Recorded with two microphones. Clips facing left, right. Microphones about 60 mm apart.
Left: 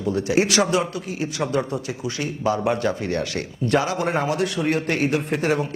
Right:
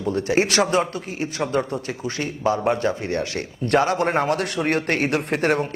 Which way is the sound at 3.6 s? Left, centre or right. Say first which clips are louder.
Right 2 dB; right.